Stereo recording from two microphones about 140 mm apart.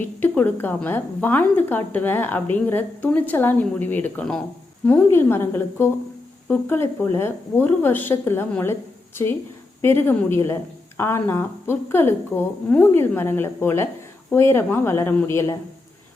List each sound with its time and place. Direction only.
0.2 s a woman's voice: 15° left (ahead or behind)
9.8 s a woman's voice: 15° left (ahead or behind)